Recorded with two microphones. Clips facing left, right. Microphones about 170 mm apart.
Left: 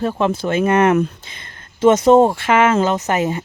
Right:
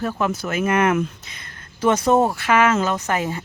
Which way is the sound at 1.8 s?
20° left (ahead or behind).